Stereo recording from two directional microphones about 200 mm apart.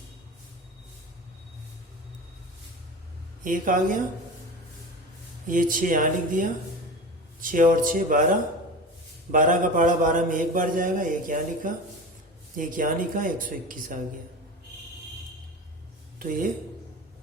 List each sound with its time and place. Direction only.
3.4 s speech: 40° right (ahead or behind)
5.5 s a man's voice: 45° right (ahead or behind)
16.1 s speech: 45° right (ahead or behind)